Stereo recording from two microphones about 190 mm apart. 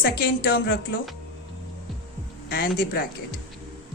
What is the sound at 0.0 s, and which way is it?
Speech, 50° left (ahead or behind).